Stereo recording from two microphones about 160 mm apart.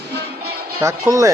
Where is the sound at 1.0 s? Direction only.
20° right (ahead or behind).